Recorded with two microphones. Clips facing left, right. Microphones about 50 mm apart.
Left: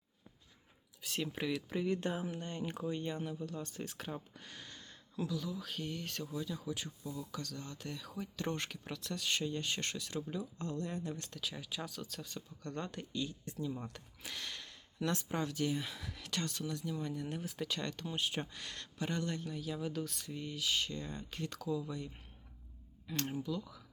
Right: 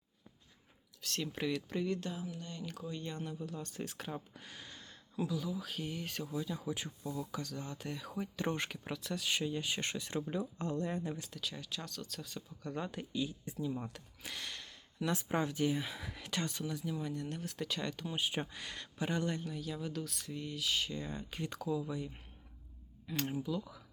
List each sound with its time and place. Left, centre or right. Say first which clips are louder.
1.0 s speech: even; centre
1.9 s speech: left 3 dB; left; by 10.1 s centre
10.1 s speech: right 3 dB; right
11.3 s speech: even; centre
14.2 s a sound: even; centre
15.3 s speech: right 3 dB; centre
19.5 s speech: left 1 dB; centre